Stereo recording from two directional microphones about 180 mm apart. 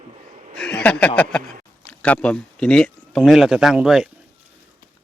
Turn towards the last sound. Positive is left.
turn(degrees=-5)  # may be behind; listen again after turning